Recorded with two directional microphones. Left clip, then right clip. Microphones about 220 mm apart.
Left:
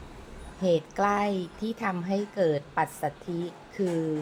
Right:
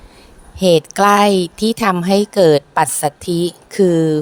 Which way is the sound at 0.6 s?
45° right (ahead or behind).